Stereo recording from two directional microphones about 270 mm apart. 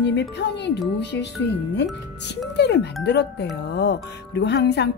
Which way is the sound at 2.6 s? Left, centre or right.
Left.